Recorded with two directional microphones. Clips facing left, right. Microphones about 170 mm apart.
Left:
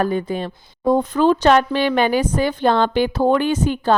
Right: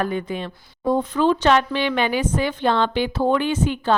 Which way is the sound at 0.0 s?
35° left (ahead or behind).